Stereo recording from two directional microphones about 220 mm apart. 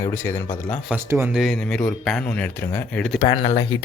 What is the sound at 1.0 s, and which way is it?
A man's voice, 10° right (ahead or behind).